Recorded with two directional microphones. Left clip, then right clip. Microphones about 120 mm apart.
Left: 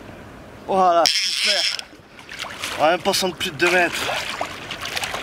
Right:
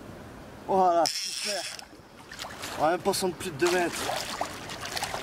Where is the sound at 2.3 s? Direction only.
10° left (ahead or behind).